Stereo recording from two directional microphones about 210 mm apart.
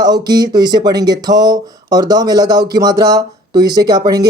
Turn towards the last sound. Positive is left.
turn(degrees=-20)  # may be behind; listen again after turning